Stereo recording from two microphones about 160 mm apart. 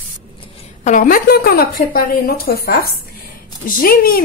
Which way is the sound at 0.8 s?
55° left (ahead or behind).